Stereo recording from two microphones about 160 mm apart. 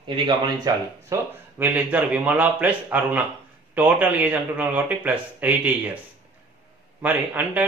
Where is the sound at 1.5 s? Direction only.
10° right (ahead or behind).